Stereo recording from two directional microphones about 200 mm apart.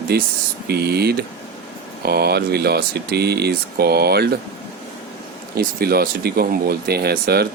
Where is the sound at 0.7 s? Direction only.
55° right (ahead or behind).